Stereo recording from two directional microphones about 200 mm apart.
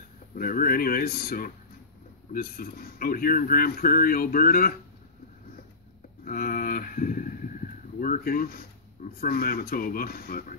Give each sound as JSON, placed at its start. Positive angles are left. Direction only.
{"t": 0.4, "sound": "speech", "side_deg": 45}
{"t": 6.2, "sound": "speech", "side_deg": 45}